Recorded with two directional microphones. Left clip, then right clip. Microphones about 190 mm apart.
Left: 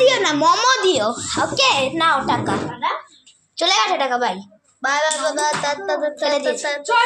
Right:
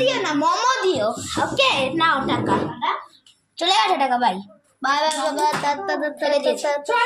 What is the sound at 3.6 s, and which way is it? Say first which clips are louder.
Speech: left 1 dB; 10° left (ahead or behind).